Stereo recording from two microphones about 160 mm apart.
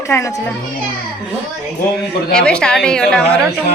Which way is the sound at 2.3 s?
5° left (ahead or behind).